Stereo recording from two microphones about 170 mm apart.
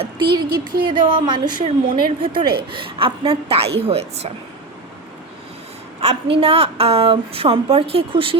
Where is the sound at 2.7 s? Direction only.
30° right (ahead or behind).